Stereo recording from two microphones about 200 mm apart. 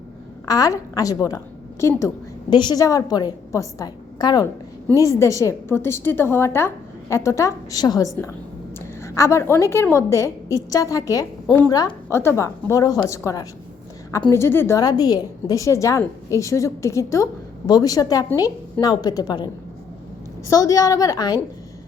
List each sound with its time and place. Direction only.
0.4 s a woman's voice: 20° left (ahead or behind)
11.7 s a woman's voice: 20° left (ahead or behind)
20.5 s a woman's voice: 15° left (ahead or behind)